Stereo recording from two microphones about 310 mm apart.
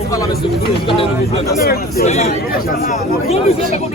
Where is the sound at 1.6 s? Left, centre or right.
Left.